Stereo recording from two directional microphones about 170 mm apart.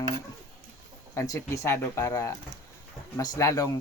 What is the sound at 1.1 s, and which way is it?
Speech, 15° left (ahead or behind).